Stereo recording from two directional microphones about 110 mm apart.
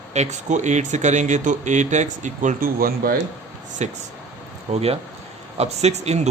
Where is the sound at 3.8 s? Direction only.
90° right.